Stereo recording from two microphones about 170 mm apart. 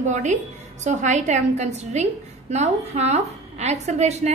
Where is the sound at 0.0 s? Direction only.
45° right (ahead or behind).